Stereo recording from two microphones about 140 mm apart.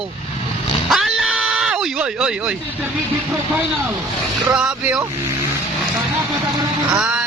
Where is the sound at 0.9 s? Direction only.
Centre (ahead or behind).